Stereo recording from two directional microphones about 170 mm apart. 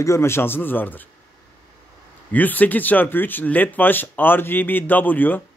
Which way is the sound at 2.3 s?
10° left (ahead or behind).